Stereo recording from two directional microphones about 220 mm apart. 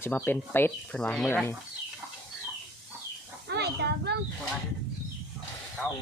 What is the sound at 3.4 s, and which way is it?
Speech, 50° right (ahead or behind).